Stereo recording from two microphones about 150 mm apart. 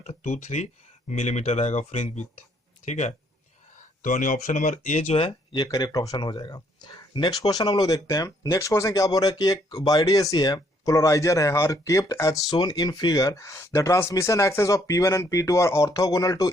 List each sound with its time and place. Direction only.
0.0 s speech: 50° left (ahead or behind)
5.6 s speech: 25° left (ahead or behind)